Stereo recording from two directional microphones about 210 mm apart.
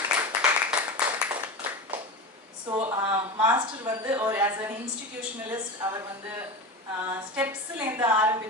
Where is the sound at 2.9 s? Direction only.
20° right (ahead or behind).